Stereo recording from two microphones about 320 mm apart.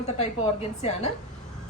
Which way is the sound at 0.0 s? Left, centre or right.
Centre.